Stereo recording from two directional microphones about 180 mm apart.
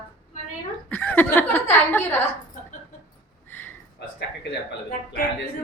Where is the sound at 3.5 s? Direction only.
10° left (ahead or behind).